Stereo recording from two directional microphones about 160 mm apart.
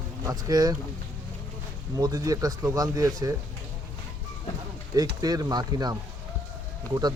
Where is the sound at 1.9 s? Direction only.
25° right (ahead or behind).